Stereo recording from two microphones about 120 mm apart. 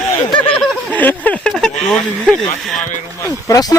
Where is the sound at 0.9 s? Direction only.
15° left (ahead or behind).